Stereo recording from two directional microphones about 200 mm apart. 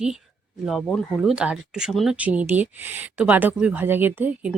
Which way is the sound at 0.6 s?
Centre (ahead or behind).